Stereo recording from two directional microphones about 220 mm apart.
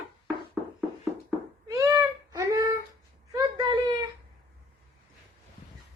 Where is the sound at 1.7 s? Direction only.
15° right (ahead or behind).